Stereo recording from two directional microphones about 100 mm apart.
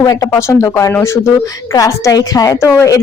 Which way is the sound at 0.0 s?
35° left (ahead or behind).